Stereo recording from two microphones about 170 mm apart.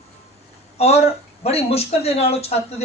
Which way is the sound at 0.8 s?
40° left (ahead or behind).